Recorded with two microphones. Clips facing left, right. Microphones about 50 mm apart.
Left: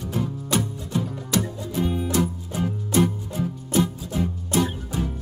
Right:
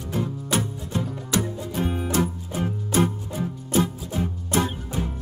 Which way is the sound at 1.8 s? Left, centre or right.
Right.